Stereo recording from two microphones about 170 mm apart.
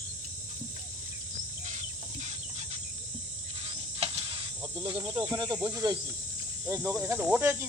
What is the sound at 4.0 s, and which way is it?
Insect, 30° right (ahead or behind).